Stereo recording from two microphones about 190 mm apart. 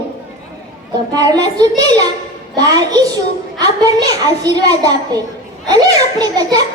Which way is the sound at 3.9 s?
20° right (ahead or behind).